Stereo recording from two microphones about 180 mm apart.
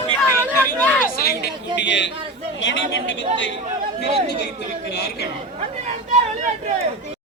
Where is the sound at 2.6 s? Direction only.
90° left.